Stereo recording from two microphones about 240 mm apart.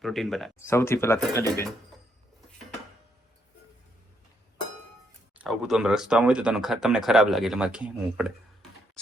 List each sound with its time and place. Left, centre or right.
0.0 s speech: centre
5.4 s speech: centre